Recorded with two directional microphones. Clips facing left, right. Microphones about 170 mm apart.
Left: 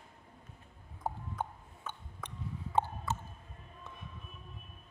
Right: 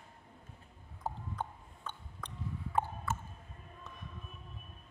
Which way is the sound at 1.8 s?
5° left (ahead or behind).